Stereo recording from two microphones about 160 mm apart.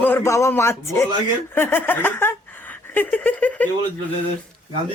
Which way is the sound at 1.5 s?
15° left (ahead or behind).